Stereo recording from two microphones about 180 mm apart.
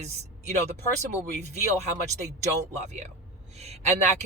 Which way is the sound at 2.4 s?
40° right (ahead or behind).